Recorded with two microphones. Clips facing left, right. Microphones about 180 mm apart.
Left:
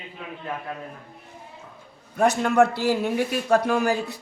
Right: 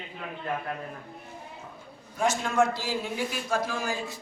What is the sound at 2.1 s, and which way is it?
A man's voice, 60° left (ahead or behind).